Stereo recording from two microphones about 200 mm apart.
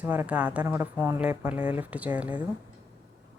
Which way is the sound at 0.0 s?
10° right (ahead or behind).